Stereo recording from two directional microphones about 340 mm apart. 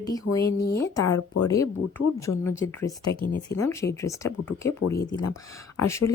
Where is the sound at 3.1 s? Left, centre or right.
Left.